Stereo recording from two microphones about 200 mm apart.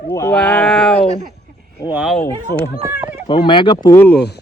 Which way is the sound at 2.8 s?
10° right (ahead or behind).